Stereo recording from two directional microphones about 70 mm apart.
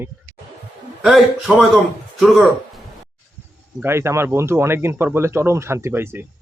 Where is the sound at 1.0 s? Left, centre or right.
Centre.